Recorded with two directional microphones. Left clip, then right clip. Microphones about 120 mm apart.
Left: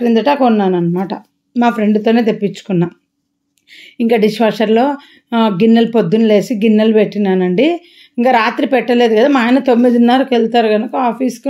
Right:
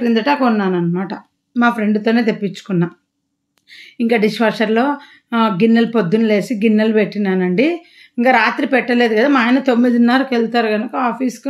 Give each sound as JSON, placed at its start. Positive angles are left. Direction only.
{"t": 0.0, "sound": "speech", "side_deg": 35}